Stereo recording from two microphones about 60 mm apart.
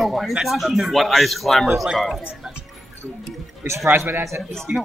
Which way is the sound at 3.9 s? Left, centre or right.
Right.